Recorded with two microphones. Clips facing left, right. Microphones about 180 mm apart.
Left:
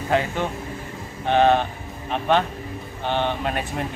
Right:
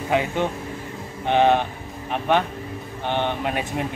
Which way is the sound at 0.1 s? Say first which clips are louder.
Right 1 dB; 15° right (ahead or behind).